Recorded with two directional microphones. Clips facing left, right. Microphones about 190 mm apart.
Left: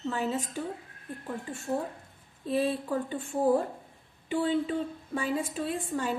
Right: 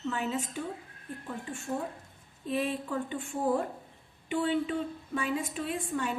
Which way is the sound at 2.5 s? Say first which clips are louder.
Left 3 dB; 35° left (ahead or behind).